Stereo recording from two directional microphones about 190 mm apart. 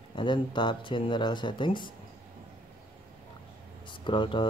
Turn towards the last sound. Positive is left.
turn(degrees=25)  # may be behind; listen again after turning